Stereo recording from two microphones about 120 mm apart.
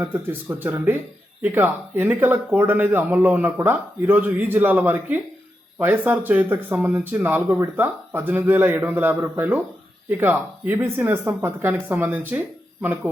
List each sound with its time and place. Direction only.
0.0 s speech: 15° right (ahead or behind)